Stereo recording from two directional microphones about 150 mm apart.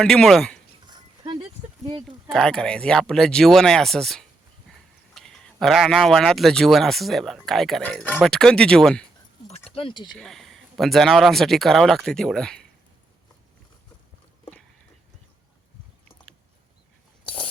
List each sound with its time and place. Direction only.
0.0 s speech: 5° left (ahead or behind)
0.9 s dog: 30° right (ahead or behind)
2.3 s speech: 5° left (ahead or behind)
9.6 s speech: 35° left (ahead or behind)
10.1 s speech: centre (ahead or behind)
17.2 s biting: 35° left (ahead or behind)